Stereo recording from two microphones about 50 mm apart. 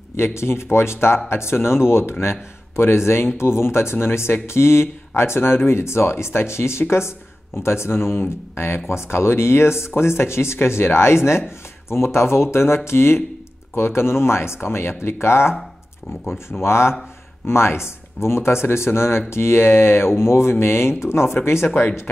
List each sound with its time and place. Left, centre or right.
0.1 s speech: left
21.6 s speech: left